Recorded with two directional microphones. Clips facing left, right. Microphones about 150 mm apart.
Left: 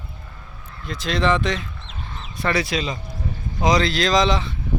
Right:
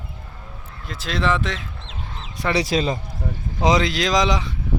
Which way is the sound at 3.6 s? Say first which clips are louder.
Even; 20° right (ahead or behind).